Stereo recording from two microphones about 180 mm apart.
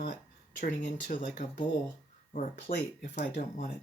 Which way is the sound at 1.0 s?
45° left (ahead or behind).